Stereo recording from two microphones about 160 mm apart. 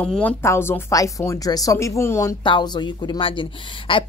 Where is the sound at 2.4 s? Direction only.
30° left (ahead or behind).